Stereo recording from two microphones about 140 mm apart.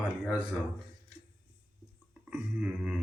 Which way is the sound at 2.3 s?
5° right (ahead or behind).